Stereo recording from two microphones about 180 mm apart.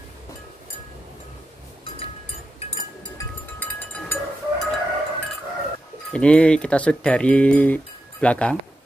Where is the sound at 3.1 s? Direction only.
10° left (ahead or behind).